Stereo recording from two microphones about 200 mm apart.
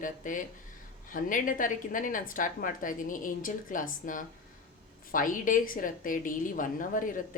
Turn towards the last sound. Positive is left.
turn(degrees=40)  # may be behind; listen again after turning